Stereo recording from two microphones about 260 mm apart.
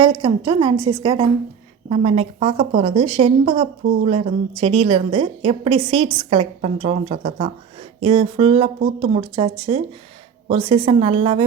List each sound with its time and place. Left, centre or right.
0.0 s a woman's voice: centre